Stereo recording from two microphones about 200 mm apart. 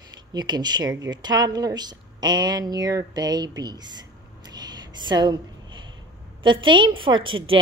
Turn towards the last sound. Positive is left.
turn(degrees=-25)  # may be behind; listen again after turning